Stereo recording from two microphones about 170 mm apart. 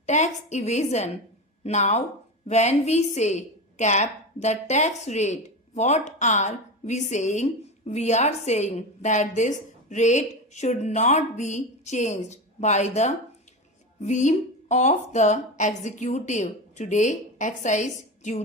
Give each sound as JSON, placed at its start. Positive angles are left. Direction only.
{"t": 0.0, "sound": "a woman's voice", "side_deg": 45}